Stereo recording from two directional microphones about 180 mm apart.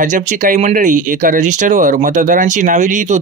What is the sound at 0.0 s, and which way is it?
Speech, 45° right (ahead or behind).